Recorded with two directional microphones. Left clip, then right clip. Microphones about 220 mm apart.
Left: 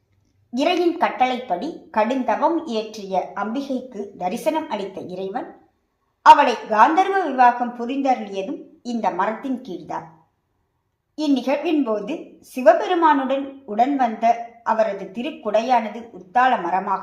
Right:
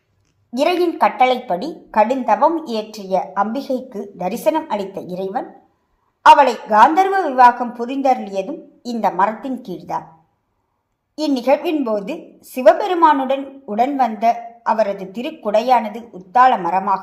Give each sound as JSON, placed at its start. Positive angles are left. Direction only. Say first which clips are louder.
{"t": 0.5, "sound": "a woman's voice", "louder": "right 3 dB", "side_deg": -40}
{"t": 11.1, "sound": "a woman's voice", "louder": "right 5 dB", "side_deg": -40}